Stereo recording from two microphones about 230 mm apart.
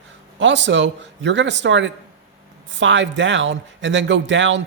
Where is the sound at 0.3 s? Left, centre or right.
Right.